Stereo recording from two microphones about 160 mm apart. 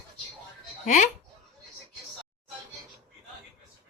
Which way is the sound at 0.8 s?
50° left (ahead or behind).